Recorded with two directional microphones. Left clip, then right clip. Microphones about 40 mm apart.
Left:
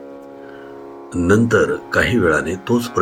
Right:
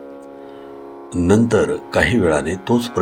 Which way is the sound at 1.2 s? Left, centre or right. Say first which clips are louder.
Left 1 dB; right.